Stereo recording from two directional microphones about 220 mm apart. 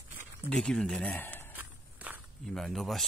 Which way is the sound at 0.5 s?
5° left (ahead or behind).